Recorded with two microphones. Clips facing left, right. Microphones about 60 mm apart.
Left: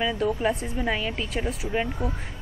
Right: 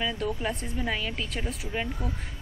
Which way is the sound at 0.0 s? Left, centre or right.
Centre.